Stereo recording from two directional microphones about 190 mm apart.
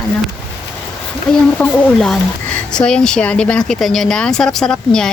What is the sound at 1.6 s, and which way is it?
A woman's voice, 5° left (ahead or behind).